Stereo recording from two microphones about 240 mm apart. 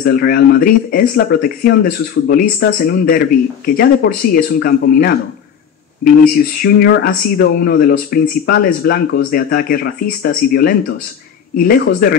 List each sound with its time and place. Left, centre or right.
0.0 s speech: left
6.6 s speech: left